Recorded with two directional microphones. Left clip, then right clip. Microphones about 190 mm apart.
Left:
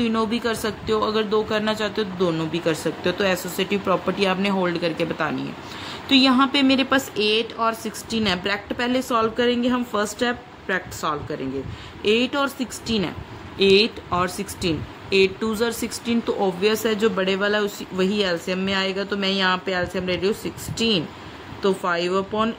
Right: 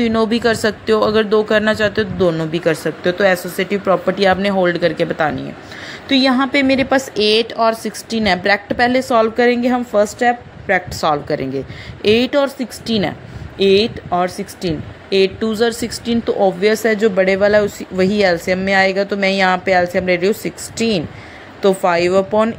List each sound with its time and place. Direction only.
0.0 s speech: 25° right (ahead or behind)